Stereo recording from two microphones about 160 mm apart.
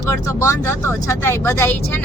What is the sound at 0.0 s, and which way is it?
Speech, 20° left (ahead or behind).